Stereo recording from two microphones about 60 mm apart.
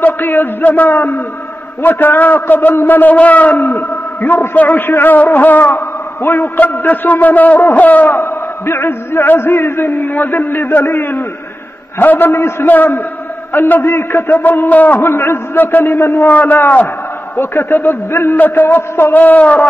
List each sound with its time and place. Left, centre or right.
0.0 s a man's voice: left
8.2 s a man's voice: left
12.6 s a man's voice: left
14.3 s a man's voice: left
15.0 s a man's voice: left
16.3 s a man's voice: left
18.8 s speech: left
19.1 s a man's voice: left